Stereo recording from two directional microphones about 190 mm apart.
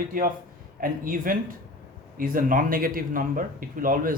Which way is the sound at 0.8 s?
45° right (ahead or behind).